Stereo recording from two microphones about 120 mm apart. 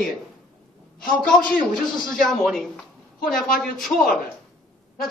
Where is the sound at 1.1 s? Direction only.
5° left (ahead or behind).